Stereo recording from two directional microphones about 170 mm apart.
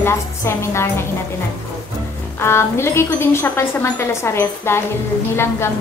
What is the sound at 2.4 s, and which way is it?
Speech, 15° left (ahead or behind).